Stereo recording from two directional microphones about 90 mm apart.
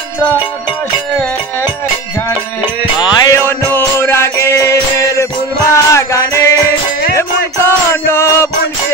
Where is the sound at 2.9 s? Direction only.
55° left (ahead or behind).